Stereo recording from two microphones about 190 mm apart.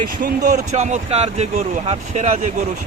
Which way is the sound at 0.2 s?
45° right (ahead or behind).